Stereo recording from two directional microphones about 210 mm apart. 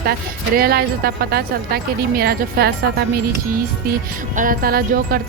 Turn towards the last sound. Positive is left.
turn(degrees=-45)  # may be behind; listen again after turning